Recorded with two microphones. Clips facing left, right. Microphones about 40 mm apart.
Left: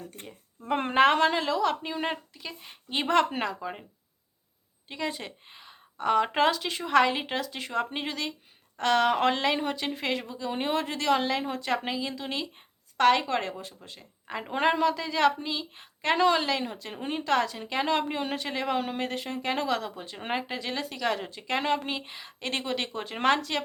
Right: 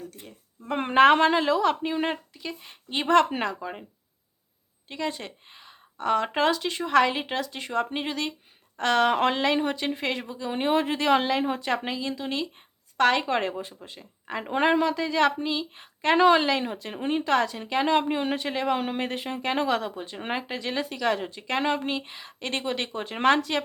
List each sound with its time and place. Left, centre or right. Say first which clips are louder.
0.8 s a woman's voice: right 4 dB; centre
4.9 s a woman's voice: right 2 dB; centre
11.7 s a woman's voice: right 1 dB; centre
13.2 s a woman's voice: right 3 dB; centre
16.1 s speech: right 5 dB; right
16.5 s a woman's voice: right 3 dB; centre